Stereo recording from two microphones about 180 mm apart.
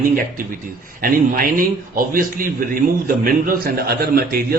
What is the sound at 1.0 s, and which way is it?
A man's voice, 50° right (ahead or behind).